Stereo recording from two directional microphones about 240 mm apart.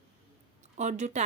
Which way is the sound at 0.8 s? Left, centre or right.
Right.